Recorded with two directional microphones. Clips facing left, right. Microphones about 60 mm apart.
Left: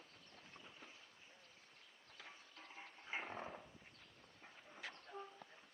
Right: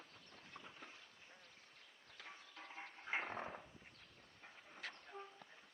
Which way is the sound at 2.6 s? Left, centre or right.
Right.